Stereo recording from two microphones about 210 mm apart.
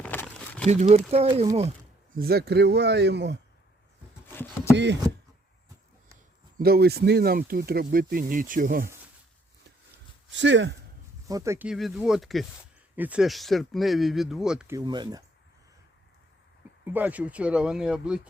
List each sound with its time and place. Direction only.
0.0 s a sound: 5° left (ahead or behind)
0.7 s speech: 35° right (ahead or behind)
2.1 s speech: 45° right (ahead or behind)
4.3 s speech: 10° left (ahead or behind)
6.6 s speech: 50° right (ahead or behind)
10.3 s speech: 60° right (ahead or behind)
11.3 s speech: 15° right (ahead or behind)
14.8 s speech: 20° right (ahead or behind)
16.8 s speech: 10° right (ahead or behind)